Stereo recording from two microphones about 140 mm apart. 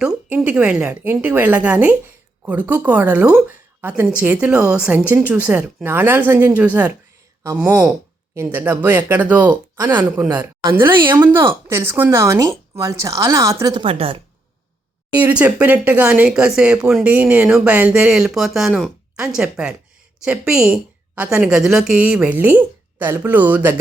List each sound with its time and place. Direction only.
0.0 s a woman's voice: 10° right (ahead or behind); by 13.8 s 25° right (ahead or behind)
13.8 s a woman's voice: 45° right (ahead or behind)
15.2 s a woman's voice: 10° right (ahead or behind)